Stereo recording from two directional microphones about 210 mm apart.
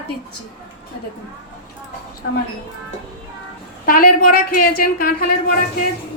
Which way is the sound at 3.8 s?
45° left (ahead or behind).